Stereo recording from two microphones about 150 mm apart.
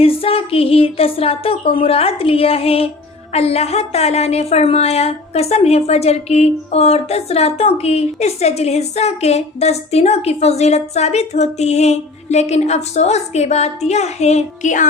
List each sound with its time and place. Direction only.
0.0 s a woman's voice: 40° left (ahead or behind); by 14.8 s 55° left (ahead or behind)